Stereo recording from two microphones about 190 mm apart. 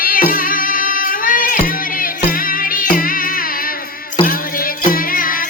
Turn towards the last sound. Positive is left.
turn(degrees=45)  # may be behind; listen again after turning